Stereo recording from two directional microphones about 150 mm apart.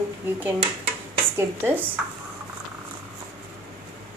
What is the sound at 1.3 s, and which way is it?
Speech, 15° right (ahead or behind).